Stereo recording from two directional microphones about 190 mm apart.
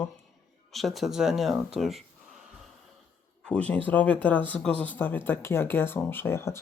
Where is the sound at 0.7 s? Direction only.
Centre (ahead or behind).